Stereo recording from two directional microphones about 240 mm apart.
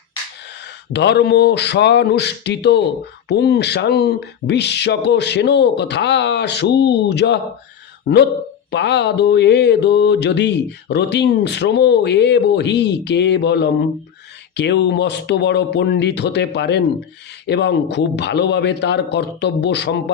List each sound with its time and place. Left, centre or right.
0.9 s mantra: left
8.7 s mantra: left